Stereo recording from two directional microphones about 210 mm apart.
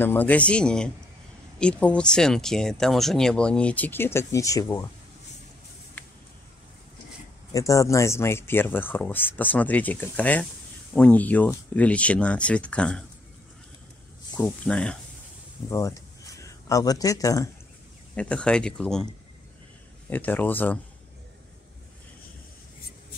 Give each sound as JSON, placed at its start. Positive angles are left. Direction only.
{"t": 0.0, "sound": "speech", "side_deg": 10}
{"t": 7.5, "sound": "speech", "side_deg": 15}
{"t": 14.3, "sound": "speech", "side_deg": 5}
{"t": 15.7, "sound": "speech", "side_deg": 15}
{"t": 18.1, "sound": "speech", "side_deg": 5}
{"t": 20.1, "sound": "speech", "side_deg": 10}